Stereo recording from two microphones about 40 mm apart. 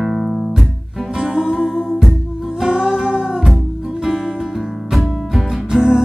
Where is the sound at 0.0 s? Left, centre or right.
Centre.